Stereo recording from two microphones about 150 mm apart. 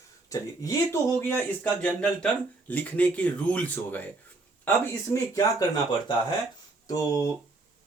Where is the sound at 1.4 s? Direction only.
10° left (ahead or behind).